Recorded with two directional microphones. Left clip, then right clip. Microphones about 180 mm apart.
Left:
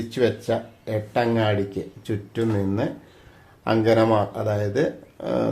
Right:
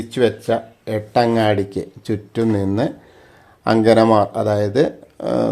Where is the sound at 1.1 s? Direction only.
55° right (ahead or behind).